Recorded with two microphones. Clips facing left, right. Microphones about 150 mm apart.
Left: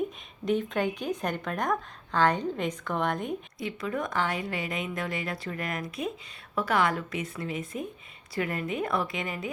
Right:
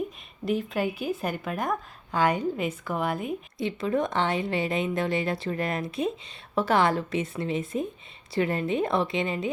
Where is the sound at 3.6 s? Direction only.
25° right (ahead or behind).